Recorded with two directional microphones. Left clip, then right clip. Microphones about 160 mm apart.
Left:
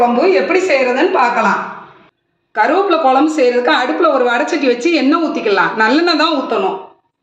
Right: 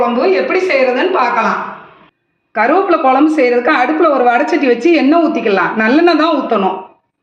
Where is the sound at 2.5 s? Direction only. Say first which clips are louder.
Right 1 dB; 50° right (ahead or behind).